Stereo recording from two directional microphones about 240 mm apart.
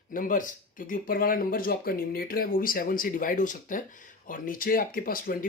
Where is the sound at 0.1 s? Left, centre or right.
Left.